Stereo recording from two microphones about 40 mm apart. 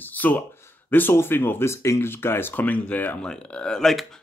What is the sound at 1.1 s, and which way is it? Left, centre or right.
Speech, left.